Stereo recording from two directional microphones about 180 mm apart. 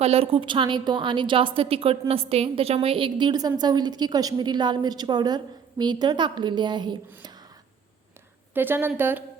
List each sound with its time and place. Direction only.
0.0 s a woman's voice: 35° right (ahead or behind)
7.2 s whispering: 25° right (ahead or behind)
8.5 s a woman's voice: 10° right (ahead or behind)